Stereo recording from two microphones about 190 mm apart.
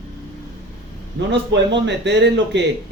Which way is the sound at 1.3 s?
65° right (ahead or behind).